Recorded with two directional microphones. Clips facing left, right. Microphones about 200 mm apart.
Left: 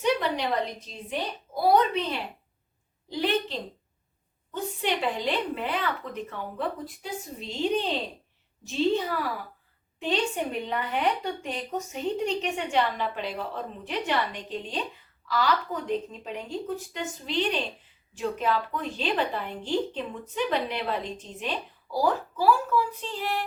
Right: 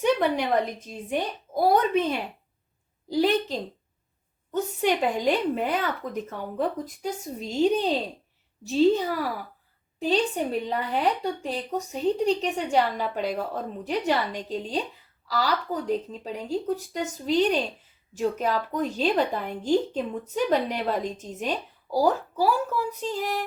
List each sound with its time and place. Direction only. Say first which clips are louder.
0.0 s a woman's voice: right 3 dB; 50° right (ahead or behind)